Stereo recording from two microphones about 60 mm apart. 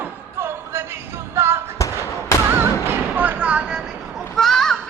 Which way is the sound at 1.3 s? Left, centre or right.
Right.